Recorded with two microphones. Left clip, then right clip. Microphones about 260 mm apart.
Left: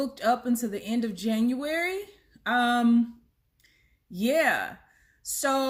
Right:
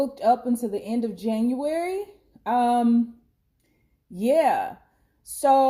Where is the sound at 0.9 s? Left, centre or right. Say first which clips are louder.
Right 3 dB; left.